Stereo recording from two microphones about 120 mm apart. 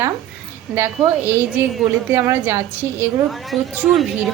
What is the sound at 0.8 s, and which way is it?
A woman's voice, 15° right (ahead or behind).